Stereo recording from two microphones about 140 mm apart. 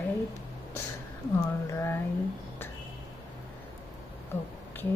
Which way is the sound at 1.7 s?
20° left (ahead or behind).